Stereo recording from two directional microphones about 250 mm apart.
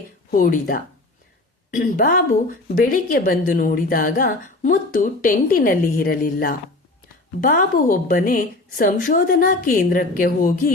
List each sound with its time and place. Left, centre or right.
0.3 s a woman's voice: left